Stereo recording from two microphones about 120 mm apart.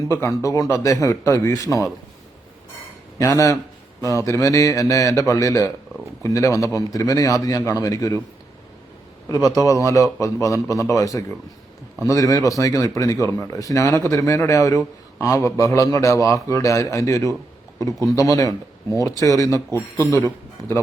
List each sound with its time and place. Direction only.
0.1 s a man's voice: 25° left (ahead or behind)
3.2 s a man's voice: 25° left (ahead or behind)
9.3 s a man's voice: 30° left (ahead or behind)